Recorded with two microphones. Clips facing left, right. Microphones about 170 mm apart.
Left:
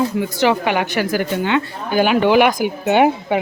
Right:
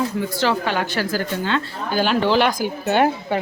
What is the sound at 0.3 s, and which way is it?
A woman's voice, 15° left (ahead or behind).